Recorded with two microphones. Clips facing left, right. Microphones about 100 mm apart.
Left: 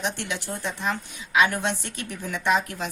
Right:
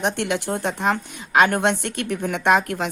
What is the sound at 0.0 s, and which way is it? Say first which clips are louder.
A woman's voice: right 7 dB; 55° right (ahead or behind).